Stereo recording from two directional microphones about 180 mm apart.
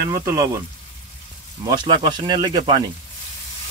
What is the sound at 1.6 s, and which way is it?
Speech, 25° right (ahead or behind).